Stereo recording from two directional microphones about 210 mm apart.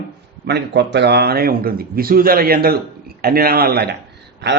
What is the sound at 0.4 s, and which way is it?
A man's voice, 55° right (ahead or behind).